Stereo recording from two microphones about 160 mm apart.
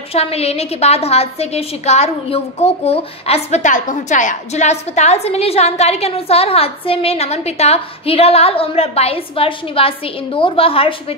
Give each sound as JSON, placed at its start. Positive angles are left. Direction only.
{"t": 0.1, "sound": "a woman's voice", "side_deg": 40}